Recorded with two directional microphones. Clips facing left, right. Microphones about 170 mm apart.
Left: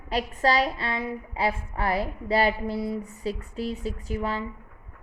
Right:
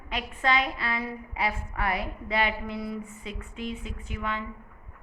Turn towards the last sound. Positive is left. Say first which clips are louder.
# left 4 dB
turn(degrees=35)  # may be behind; listen again after turning